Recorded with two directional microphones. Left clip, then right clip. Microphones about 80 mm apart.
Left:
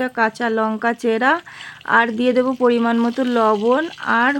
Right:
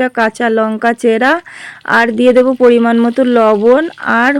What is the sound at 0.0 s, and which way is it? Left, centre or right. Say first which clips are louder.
Speech: right 6 dB; right.